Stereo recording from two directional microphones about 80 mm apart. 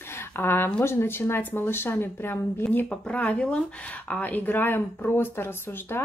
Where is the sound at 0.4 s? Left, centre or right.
Left.